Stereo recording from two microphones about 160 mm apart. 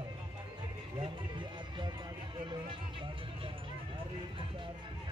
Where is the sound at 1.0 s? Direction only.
30° right (ahead or behind).